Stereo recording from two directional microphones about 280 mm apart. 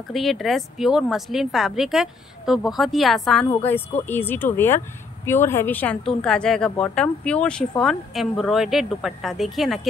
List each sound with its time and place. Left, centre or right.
0.1 s speech: centre